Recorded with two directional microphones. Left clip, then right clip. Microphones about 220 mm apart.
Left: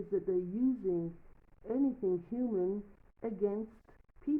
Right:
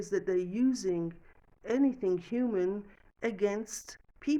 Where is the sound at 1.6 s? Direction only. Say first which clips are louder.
Right 4 dB; 25° right (ahead or behind).